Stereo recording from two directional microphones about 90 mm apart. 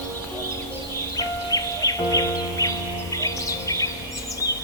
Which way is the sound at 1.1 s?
40° left (ahead or behind).